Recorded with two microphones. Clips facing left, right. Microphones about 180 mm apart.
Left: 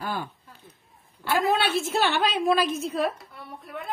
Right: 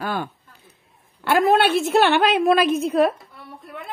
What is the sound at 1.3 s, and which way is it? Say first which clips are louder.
A woman's voice: right 6 dB; 60° right (ahead or behind).